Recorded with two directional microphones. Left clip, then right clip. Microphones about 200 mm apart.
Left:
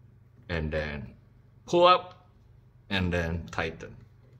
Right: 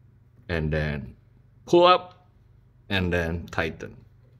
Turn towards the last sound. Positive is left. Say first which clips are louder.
# right 4 dB
turn(degrees=-55)  # may be behind; listen again after turning